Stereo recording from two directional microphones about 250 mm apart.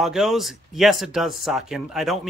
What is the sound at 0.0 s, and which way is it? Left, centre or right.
Speech, centre.